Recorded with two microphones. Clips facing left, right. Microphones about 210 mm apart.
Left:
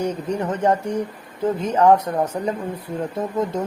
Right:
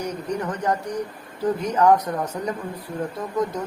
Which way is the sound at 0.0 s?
25° left (ahead or behind).